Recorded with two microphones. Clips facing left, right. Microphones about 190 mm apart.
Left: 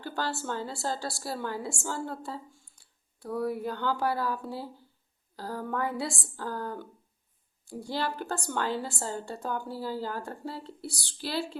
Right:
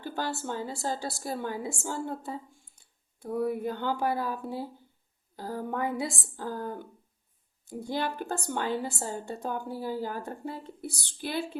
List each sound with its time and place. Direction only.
0.0 s a woman's voice: 15° right (ahead or behind)